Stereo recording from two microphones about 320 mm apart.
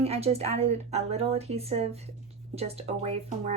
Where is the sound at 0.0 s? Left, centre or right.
Centre.